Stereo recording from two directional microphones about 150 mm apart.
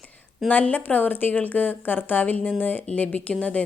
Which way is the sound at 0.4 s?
10° left (ahead or behind).